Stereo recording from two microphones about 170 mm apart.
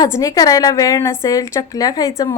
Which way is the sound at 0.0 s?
20° left (ahead or behind).